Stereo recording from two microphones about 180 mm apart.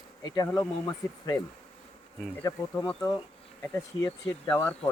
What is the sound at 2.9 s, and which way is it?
Speech, 15° left (ahead or behind).